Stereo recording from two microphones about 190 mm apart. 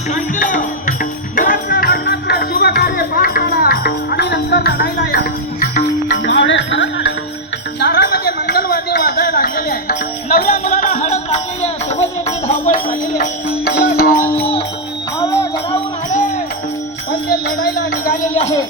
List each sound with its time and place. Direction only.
0.1 s speech: 45° left (ahead or behind)
1.4 s music: 50° left (ahead or behind)
6.2 s music: 75° left (ahead or behind)
7.8 s music: 65° left (ahead or behind); by 12.7 s 35° left (ahead or behind)
13.7 s music: 55° left (ahead or behind)
14.3 s music: 30° left (ahead or behind)
17.1 s music: 55° left (ahead or behind)
17.7 s speech: 50° left (ahead or behind)